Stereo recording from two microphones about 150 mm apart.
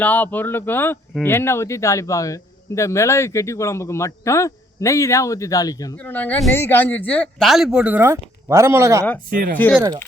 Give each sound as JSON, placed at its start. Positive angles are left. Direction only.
{"t": 0.0, "sound": "a man's voice", "side_deg": 10}
{"t": 6.0, "sound": "speech", "side_deg": 10}
{"t": 7.4, "sound": "speech", "side_deg": 0}